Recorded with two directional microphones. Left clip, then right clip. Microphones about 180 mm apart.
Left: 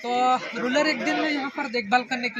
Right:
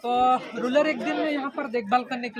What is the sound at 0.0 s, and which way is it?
Speech, 15° right (ahead or behind).